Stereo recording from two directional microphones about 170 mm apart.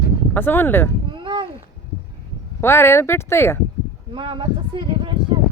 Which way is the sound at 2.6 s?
15° left (ahead or behind).